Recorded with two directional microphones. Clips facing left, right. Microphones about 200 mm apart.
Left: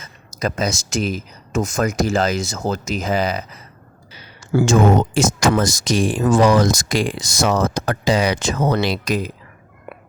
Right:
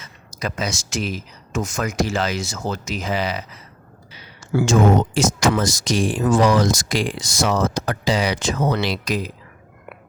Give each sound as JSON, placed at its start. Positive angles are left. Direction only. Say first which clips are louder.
{"t": 0.3, "sound": "speech", "louder": "left 4 dB", "side_deg": 40}